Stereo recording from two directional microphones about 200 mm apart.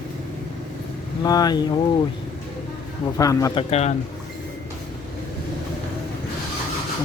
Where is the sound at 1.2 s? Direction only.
20° left (ahead or behind).